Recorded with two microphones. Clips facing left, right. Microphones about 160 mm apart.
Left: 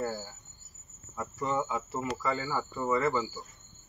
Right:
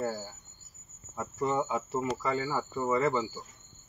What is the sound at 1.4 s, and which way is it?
A man's voice, 25° right (ahead or behind).